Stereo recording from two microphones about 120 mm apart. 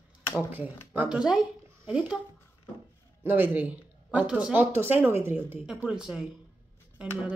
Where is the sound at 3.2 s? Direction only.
15° right (ahead or behind).